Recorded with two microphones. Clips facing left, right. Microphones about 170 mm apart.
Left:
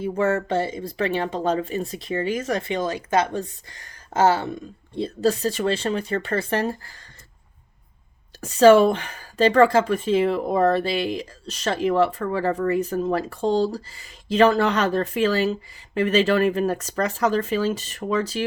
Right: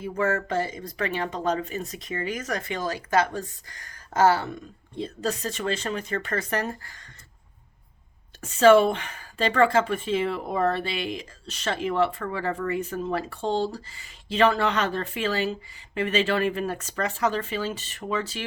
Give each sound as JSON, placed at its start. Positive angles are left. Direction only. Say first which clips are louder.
{"t": 0.0, "sound": "speech", "louder": "left 4 dB", "side_deg": 25}
{"t": 8.4, "sound": "speech", "louder": "left 3 dB", "side_deg": 40}